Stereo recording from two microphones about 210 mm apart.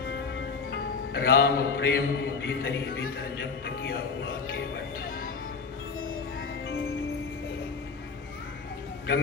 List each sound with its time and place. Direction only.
0.7 s music: 50° left (ahead or behind)